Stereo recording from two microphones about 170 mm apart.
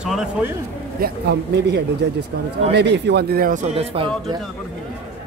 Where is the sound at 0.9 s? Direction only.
70° right (ahead or behind).